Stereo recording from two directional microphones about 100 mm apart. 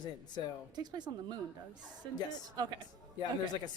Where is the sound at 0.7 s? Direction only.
45° right (ahead or behind).